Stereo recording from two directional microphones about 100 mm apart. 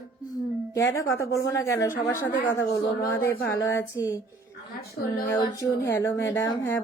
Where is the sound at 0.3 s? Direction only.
35° left (ahead or behind).